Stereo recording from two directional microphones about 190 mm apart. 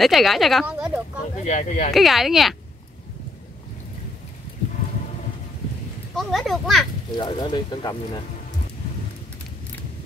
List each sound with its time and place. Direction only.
0.0 s speech: centre (ahead or behind)
1.4 s speech: 40° left (ahead or behind)
2.0 s a child's voice: centre (ahead or behind)
6.1 s a child's voice: centre (ahead or behind)
7.2 s speech: 25° left (ahead or behind)